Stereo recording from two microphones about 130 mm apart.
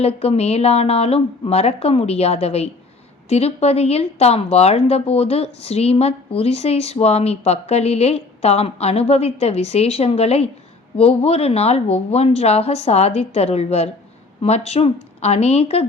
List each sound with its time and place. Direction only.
0.0 s speech: 50° left (ahead or behind)